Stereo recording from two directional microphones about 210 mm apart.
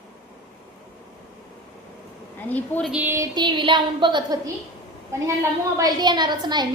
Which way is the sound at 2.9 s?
10° right (ahead or behind).